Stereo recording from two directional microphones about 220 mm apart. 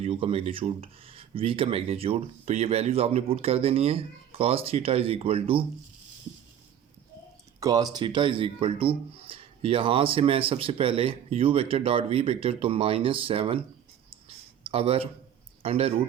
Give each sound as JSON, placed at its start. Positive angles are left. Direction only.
{"t": 0.0, "sound": "speech", "side_deg": -25}
{"t": 7.6, "sound": "speech", "side_deg": -15}
{"t": 14.1, "sound": "a sound", "side_deg": -25}
{"t": 15.6, "sound": "speech", "side_deg": -25}